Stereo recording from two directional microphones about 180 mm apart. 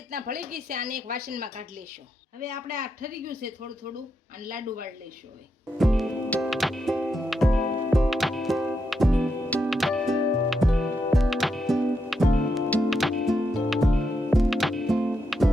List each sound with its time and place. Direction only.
0.1 s speech: 55° right (ahead or behind)
2.7 s a woman's voice: 50° right (ahead or behind)
5.8 s music: centre (ahead or behind)